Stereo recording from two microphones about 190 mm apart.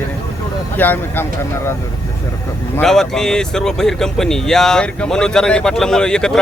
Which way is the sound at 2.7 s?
5° left (ahead or behind).